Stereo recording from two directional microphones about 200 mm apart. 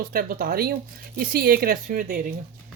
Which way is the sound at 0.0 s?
45° right (ahead or behind).